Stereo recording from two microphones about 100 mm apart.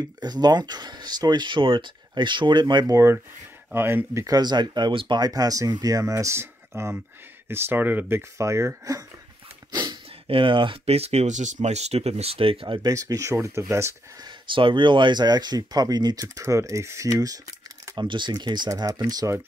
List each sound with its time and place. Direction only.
0.2 s speech: 45° right (ahead or behind)
3.7 s speech: 20° right (ahead or behind)
4.4 s speech: 45° right (ahead or behind); by 8.2 s 20° right (ahead or behind)
8.4 s speech: 30° right (ahead or behind)
9.7 s a sound: 45° right (ahead or behind)
10.2 s speech: 60° right (ahead or behind)
12.8 s speech: 35° right (ahead or behind)
14.2 s speech: 55° right (ahead or behind)
16.3 s speech: 30° right (ahead or behind)
17.9 s speech: 50° right (ahead or behind)